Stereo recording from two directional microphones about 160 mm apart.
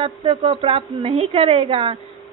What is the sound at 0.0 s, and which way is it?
A woman's voice, 35° right (ahead or behind).